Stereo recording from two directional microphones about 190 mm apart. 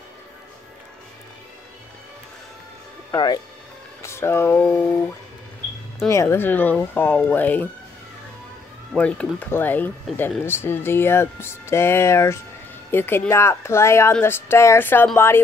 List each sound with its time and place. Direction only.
3.1 s speech: 20° left (ahead or behind)
6.0 s speech: 15° left (ahead or behind)
8.9 s speech: 5° left (ahead or behind)